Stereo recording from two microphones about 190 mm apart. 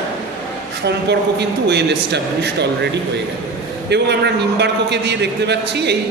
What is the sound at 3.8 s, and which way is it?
A man's voice, 60° right (ahead or behind).